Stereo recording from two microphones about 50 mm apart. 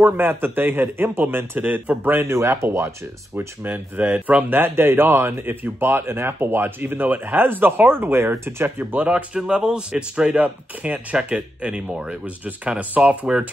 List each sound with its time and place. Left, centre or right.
0.0 s speech: right
2.2 s speech: right
3.3 s speech: right
9.3 s speech: centre